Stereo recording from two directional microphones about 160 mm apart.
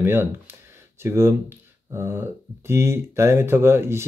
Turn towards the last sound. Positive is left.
turn(degrees=-15)  # may be behind; listen again after turning